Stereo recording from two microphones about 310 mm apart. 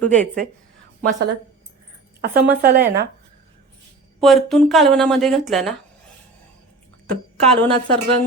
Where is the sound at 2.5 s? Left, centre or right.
Right.